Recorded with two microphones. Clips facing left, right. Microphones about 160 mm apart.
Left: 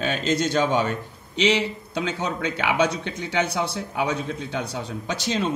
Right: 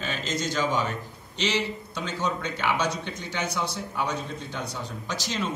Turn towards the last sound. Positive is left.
turn(degrees=65)  # may be behind; listen again after turning